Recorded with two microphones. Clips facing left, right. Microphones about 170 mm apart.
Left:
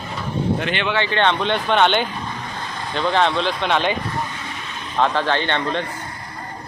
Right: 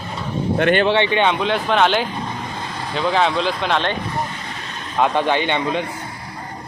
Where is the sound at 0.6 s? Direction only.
55° right (ahead or behind).